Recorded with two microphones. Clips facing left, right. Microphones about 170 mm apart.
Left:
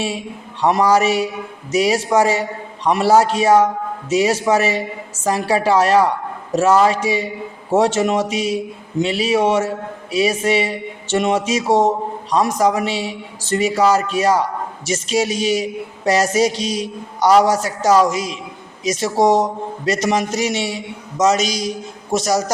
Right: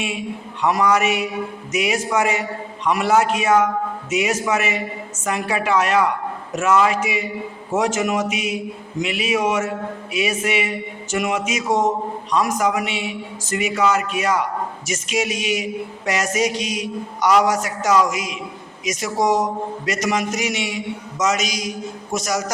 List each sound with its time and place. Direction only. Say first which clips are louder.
0.6 s a man's voice: left 3 dB; 30° left (ahead or behind)